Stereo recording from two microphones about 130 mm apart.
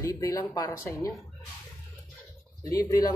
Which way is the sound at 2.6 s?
30° left (ahead or behind).